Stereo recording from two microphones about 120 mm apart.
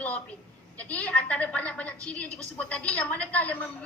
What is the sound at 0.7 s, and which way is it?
A woman's voice, 10° left (ahead or behind).